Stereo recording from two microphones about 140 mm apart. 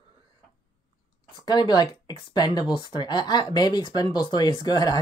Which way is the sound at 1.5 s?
30° left (ahead or behind).